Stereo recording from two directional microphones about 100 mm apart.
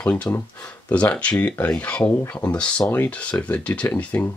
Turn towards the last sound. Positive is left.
turn(degrees=20)  # may be behind; listen again after turning